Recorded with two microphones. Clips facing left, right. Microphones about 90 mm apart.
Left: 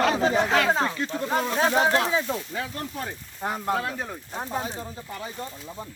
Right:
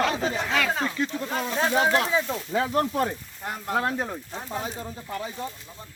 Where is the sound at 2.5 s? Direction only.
90° right.